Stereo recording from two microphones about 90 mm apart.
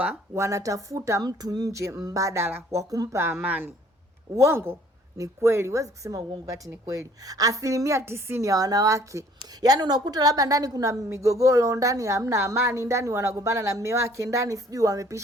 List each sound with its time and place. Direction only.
0.3 s a woman's voice: 35° right (ahead or behind)
2.9 s speech: 45° right (ahead or behind)
3.2 s a woman's voice: 25° right (ahead or behind)
9.6 s a woman's voice: 50° right (ahead or behind)